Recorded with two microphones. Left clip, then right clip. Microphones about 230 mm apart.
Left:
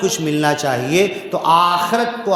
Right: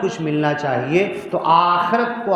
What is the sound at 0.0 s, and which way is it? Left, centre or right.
Speech, left.